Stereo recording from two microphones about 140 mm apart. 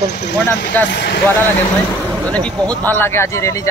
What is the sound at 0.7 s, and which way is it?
Speech, 15° left (ahead or behind).